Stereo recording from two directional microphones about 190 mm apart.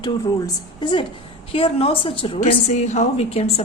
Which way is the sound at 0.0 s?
25° left (ahead or behind).